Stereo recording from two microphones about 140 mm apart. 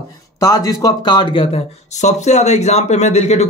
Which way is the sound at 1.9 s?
55° left (ahead or behind).